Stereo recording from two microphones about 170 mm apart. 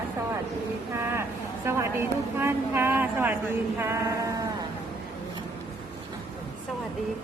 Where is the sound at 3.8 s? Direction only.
15° right (ahead or behind).